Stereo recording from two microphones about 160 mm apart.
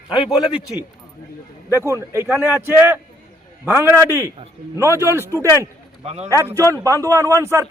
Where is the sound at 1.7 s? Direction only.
15° right (ahead or behind).